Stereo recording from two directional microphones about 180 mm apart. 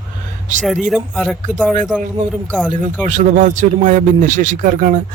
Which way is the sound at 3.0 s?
45° right (ahead or behind).